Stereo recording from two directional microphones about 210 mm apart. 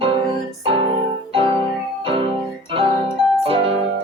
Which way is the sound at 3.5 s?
25° right (ahead or behind).